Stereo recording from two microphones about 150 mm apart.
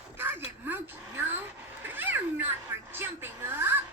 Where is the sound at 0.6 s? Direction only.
15° right (ahead or behind).